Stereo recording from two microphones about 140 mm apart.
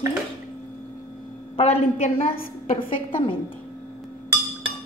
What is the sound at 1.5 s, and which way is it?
Speech, 50° left (ahead or behind).